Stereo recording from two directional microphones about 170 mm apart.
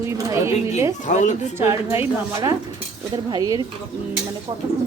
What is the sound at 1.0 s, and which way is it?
Speech, 45° left (ahead or behind).